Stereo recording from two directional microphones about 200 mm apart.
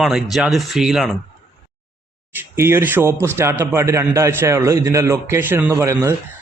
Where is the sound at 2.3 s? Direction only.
10° right (ahead or behind).